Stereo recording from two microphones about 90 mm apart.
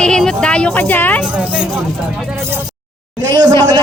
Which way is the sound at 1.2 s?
15° right (ahead or behind).